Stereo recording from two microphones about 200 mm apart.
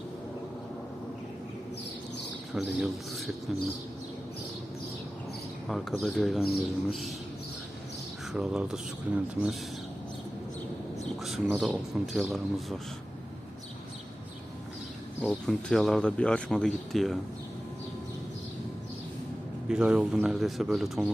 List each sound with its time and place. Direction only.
2.5 s speech: centre (ahead or behind)
5.6 s speech: centre (ahead or behind)
8.3 s speech: 5° right (ahead or behind)
11.2 s speech: centre (ahead or behind)
15.2 s speech: 5° left (ahead or behind)
19.6 s speech: 5° right (ahead or behind)